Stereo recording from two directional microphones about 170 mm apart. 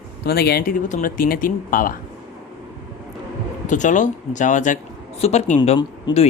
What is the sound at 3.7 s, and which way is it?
Speech, 50° left (ahead or behind).